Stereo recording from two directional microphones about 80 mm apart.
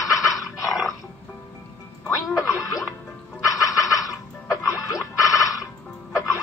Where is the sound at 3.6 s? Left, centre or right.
Left.